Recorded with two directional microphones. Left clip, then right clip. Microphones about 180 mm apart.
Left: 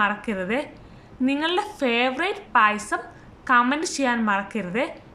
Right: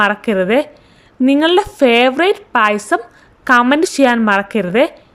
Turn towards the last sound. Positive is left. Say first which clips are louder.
# right 13 dB
turn(degrees=-45)  # may be behind; listen again after turning